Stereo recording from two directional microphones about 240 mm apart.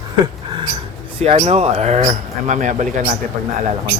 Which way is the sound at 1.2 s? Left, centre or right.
Right.